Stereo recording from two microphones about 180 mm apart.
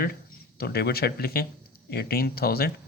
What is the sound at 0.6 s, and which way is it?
Speech, 60° left (ahead or behind).